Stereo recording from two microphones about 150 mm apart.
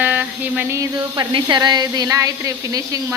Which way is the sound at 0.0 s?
10° right (ahead or behind).